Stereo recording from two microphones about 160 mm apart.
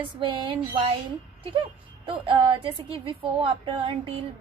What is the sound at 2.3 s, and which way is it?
Child singing, 30° right (ahead or behind).